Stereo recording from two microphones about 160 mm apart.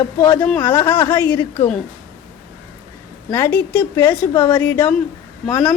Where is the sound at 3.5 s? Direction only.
10° left (ahead or behind).